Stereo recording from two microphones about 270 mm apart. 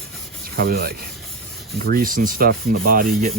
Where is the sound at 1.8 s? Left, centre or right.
Right.